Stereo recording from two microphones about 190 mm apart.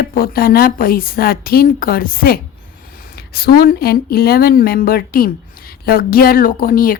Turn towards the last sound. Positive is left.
turn(degrees=50)  # may be behind; listen again after turning